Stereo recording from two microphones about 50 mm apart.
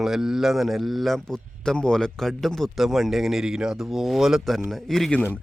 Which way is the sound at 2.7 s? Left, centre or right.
Centre.